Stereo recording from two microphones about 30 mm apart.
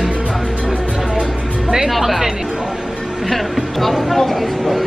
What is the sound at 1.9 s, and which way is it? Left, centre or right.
Speech, centre.